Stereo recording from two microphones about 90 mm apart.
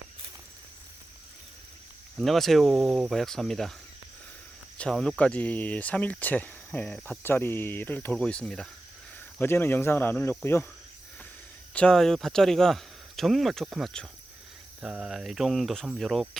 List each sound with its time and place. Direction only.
2.1 s speech: centre (ahead or behind)
4.8 s speech: 10° left (ahead or behind)
7.2 s speech: 25° left (ahead or behind)
9.4 s speech: 25° left (ahead or behind)
11.7 s speech: 10° left (ahead or behind)